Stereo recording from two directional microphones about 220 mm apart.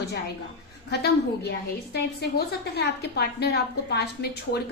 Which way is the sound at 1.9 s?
50° left (ahead or behind).